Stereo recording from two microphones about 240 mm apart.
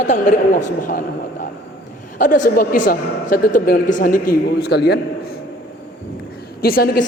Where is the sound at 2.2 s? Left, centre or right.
Left.